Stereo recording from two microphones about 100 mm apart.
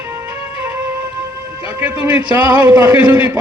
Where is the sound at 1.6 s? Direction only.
15° right (ahead or behind).